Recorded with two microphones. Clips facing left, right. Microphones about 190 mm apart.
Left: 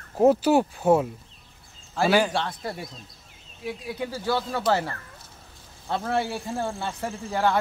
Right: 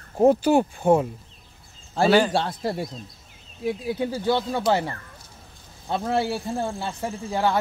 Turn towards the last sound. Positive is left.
turn(degrees=-15)  # may be behind; listen again after turning